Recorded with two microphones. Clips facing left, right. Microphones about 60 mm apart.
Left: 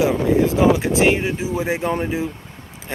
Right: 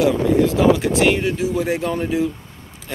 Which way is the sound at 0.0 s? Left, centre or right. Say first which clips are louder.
Right 1 dB; left.